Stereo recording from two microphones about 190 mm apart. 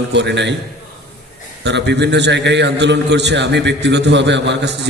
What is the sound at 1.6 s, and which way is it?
A man's voice, 65° right (ahead or behind).